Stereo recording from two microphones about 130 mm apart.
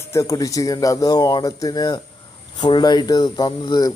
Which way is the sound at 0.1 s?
25° left (ahead or behind).